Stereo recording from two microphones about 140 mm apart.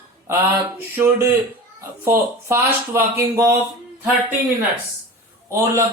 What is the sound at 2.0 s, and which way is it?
Speech, 15° right (ahead or behind).